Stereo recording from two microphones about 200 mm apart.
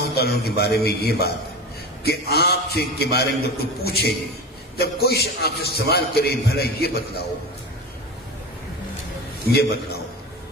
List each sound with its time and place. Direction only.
0.1 s a man's voice: 50° left (ahead or behind)